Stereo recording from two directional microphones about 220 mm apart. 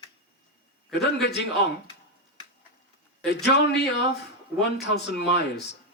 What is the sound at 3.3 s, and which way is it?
Speech, 50° left (ahead or behind).